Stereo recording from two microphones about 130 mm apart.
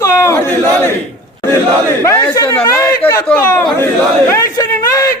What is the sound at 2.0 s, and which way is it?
A man's voice, 20° left (ahead or behind).